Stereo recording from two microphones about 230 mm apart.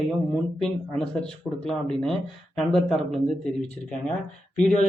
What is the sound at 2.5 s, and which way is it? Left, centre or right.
Speech, centre.